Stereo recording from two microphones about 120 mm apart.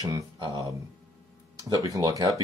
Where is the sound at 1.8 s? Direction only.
30° right (ahead or behind).